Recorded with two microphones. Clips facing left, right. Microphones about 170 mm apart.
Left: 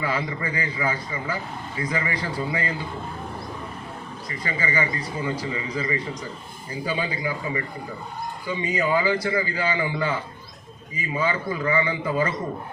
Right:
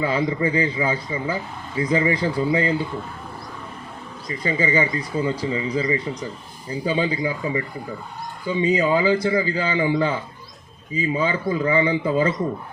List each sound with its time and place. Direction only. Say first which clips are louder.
0.0 s a man's voice: right 6 dB; 25° right (ahead or behind)
4.3 s a man's voice: right 7 dB; 25° right (ahead or behind)
8.6 s a man's voice: right 4 dB; 25° right (ahead or behind)